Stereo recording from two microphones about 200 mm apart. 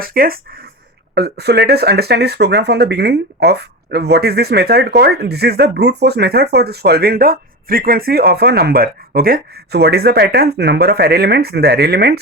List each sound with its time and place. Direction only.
0.0 s speech: 45° right (ahead or behind)